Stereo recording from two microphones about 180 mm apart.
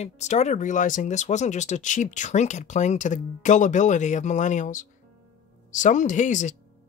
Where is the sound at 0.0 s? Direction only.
40° left (ahead or behind).